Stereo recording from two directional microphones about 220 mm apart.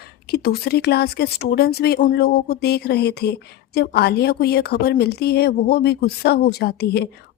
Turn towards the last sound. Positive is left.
turn(degrees=45)  # may be behind; listen again after turning